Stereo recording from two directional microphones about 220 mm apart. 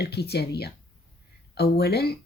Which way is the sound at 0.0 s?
45° left (ahead or behind).